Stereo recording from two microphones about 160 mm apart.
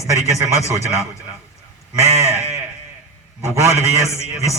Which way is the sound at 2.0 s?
45° right (ahead or behind).